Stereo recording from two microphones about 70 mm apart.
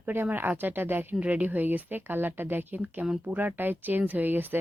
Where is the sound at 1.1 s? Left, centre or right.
Centre.